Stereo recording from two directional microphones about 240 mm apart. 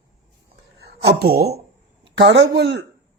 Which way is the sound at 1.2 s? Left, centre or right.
Right.